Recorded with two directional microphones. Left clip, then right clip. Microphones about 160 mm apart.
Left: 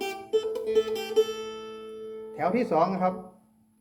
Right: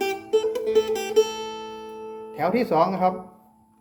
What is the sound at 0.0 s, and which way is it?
Music, 25° right (ahead or behind).